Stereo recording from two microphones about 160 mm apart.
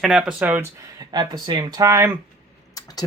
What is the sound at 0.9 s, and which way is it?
Speech, 25° right (ahead or behind).